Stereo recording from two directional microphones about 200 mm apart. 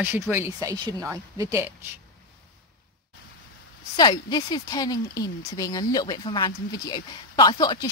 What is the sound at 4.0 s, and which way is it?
Speech, 20° left (ahead or behind).